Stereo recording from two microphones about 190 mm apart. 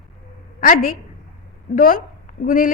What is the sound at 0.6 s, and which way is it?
A woman's voice, 45° left (ahead or behind).